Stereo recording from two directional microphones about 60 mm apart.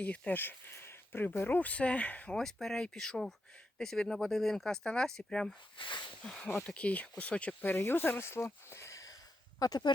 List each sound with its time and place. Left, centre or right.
0.0 s speech: left
1.5 s speech: left
2.3 s speech: centre; by 8.4 s left
8.7 s a sound: left
9.6 s speech: left